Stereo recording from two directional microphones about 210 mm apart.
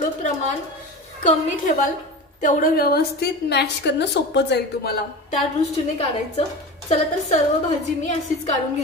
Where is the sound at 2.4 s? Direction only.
40° left (ahead or behind).